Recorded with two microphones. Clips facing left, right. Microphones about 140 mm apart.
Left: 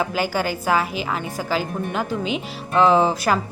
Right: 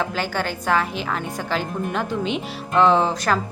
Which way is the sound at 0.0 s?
10° left (ahead or behind).